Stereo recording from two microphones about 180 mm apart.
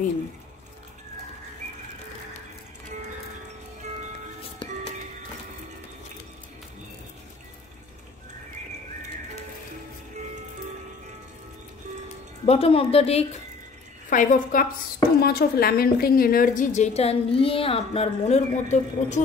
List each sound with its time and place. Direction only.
12.4 s a woman's voice: 30° left (ahead or behind)
14.1 s a woman's voice: 50° left (ahead or behind)
15.1 s a woman's voice: 60° left (ahead or behind); by 19.2 s 40° left (ahead or behind)